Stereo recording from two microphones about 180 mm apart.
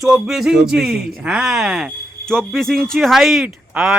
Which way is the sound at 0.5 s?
65° right (ahead or behind).